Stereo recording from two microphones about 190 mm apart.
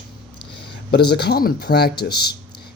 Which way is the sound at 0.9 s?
60° left (ahead or behind).